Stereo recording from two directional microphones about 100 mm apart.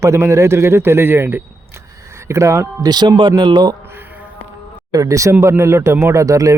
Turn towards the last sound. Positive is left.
turn(degrees=-35)  # may be behind; listen again after turning